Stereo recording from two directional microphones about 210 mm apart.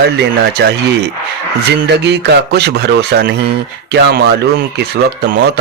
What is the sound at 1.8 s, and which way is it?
Speech, 55° right (ahead or behind).